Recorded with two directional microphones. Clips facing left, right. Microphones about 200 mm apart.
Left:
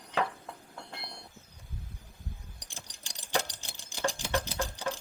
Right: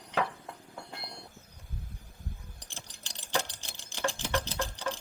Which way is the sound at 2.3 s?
15° left (ahead or behind).